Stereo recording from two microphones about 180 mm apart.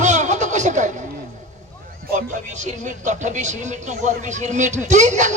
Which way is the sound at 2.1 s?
45° right (ahead or behind).